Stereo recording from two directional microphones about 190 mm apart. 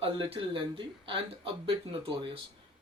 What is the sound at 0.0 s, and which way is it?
Speech, 30° right (ahead or behind).